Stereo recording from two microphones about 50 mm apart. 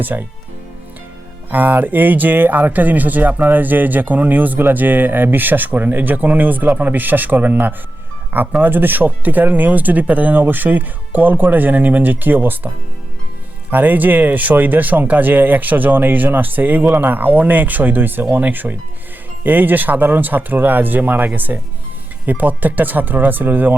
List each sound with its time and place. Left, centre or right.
0.0 s speech: right
1.5 s speech: right